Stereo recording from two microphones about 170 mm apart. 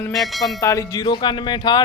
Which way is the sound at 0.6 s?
20° left (ahead or behind).